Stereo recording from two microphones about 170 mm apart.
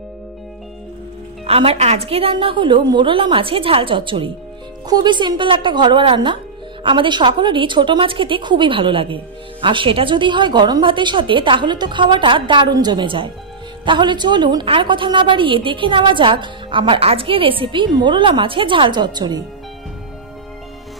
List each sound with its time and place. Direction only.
1.4 s a woman's voice: 35° right (ahead or behind)